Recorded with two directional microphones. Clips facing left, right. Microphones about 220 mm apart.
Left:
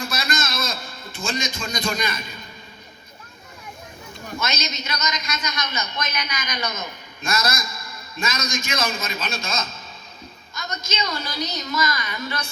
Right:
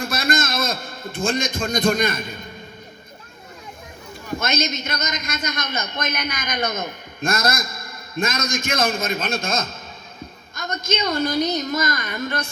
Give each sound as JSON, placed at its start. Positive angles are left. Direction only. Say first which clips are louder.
{"t": 0.0, "sound": "a man's voice", "louder": "right 5 dB", "side_deg": -55}
{"t": 4.4, "sound": "a man's voice", "louder": "right 5 dB", "side_deg": -55}